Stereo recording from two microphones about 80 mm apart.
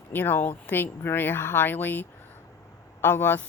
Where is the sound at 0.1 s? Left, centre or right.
Left.